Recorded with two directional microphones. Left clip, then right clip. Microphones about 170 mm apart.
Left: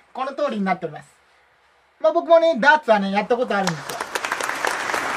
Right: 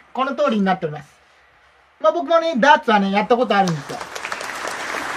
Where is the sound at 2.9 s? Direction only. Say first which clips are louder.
Right 2 dB; centre (ahead or behind).